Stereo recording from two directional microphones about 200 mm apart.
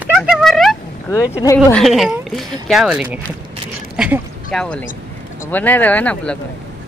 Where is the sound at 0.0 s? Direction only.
Centre (ahead or behind).